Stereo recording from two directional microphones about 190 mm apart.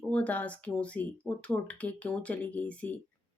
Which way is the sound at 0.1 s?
5° left (ahead or behind).